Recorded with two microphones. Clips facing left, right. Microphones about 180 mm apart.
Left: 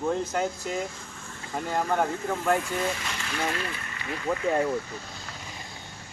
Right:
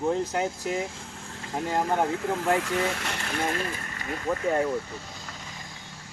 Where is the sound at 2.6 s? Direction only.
75° right (ahead or behind); by 4.1 s 45° right (ahead or behind).